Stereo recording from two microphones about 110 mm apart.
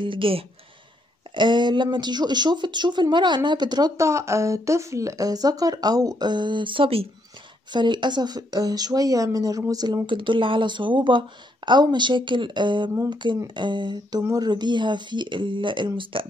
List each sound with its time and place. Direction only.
0.0 s speech: 55° right (ahead or behind)
1.3 s speech: 45° right (ahead or behind)
3.9 s speech: 25° right (ahead or behind); by 7.1 s 55° right (ahead or behind)
7.7 s speech: 45° right (ahead or behind)
10.0 s speech: 50° right (ahead or behind)